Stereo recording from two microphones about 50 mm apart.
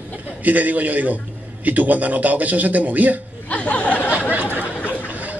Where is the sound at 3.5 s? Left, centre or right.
Left.